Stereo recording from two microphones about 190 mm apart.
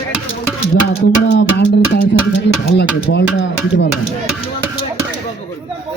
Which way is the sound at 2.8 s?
70° left (ahead or behind).